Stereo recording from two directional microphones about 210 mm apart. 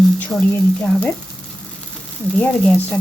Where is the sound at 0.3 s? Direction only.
5° left (ahead or behind).